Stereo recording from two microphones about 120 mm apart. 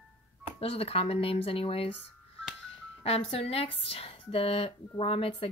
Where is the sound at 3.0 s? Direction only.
55° left (ahead or behind).